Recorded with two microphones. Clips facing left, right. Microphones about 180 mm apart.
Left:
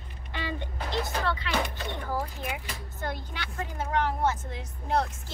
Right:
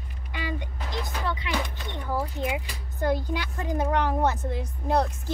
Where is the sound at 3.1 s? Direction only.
10° right (ahead or behind).